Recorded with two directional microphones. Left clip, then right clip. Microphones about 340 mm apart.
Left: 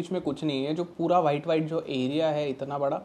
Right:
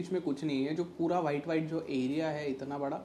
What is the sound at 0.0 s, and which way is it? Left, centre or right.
Speech, left.